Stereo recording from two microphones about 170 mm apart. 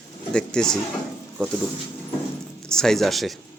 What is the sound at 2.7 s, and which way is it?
Speech, 5° left (ahead or behind).